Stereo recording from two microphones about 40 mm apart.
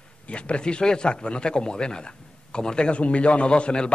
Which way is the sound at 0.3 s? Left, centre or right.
Left.